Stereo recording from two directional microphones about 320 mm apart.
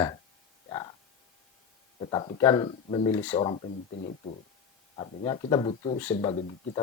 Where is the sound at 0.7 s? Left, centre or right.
Centre.